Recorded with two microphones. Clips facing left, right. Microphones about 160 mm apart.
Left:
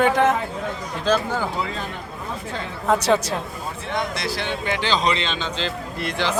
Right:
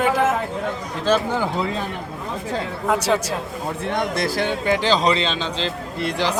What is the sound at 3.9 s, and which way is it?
A man's voice, 50° right (ahead or behind).